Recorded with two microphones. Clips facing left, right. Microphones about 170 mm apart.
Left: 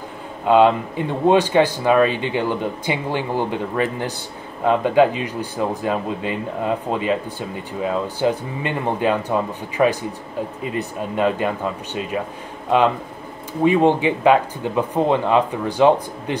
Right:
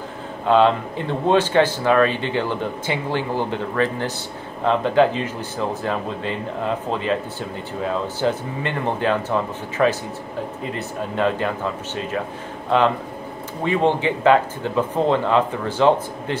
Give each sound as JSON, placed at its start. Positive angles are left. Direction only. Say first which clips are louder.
{"t": 0.5, "sound": "speech", "louder": "left 2 dB", "side_deg": 15}
{"t": 13.7, "sound": "speech", "louder": "left 3 dB", "side_deg": 15}